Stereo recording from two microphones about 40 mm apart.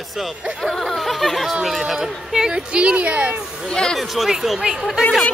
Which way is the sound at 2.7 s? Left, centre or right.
Right.